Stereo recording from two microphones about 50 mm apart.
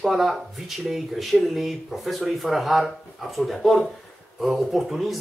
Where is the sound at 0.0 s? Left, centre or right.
Centre.